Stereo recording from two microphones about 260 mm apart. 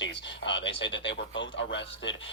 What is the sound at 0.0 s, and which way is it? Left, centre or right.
Speech, left.